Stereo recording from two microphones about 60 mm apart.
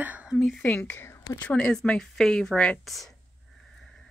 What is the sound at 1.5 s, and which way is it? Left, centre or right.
Speech, centre.